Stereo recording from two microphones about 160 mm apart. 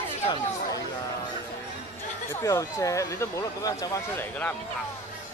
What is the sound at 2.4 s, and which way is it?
Speech, 20° left (ahead or behind).